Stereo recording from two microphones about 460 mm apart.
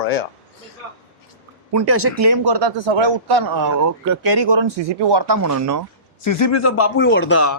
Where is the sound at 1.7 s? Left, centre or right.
Right.